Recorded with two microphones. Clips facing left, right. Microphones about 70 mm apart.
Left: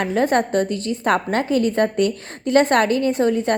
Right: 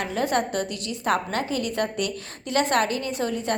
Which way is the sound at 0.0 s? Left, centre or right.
Left.